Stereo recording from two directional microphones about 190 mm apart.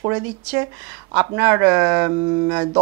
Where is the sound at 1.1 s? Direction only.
15° right (ahead or behind).